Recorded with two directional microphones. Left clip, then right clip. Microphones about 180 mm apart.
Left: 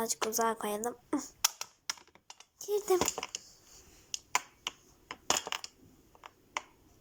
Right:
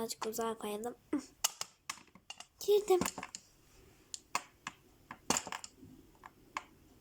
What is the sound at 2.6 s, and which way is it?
Speech, 25° right (ahead or behind).